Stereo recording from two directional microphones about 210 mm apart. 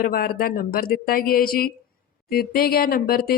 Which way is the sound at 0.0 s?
45° left (ahead or behind).